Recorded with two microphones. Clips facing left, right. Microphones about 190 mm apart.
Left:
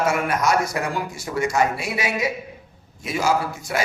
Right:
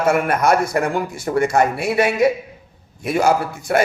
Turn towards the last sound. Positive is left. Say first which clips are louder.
# right 5 dB
turn(degrees=-55)  # may be behind; listen again after turning